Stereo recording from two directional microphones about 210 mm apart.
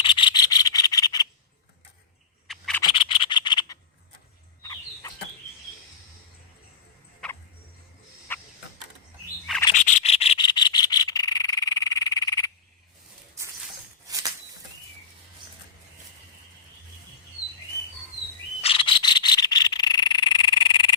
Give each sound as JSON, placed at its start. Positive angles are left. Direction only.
{"t": 0.0, "sound": "rub", "side_deg": 20}
{"t": 2.5, "sound": "scratch", "side_deg": 5}
{"t": 2.9, "sound": "scratch", "side_deg": 25}
{"t": 4.6, "sound": "chicken", "side_deg": 15}
{"t": 8.3, "sound": "a sound", "side_deg": 10}
{"t": 9.7, "sound": "frog", "side_deg": 35}
{"t": 18.6, "sound": "frog", "side_deg": 25}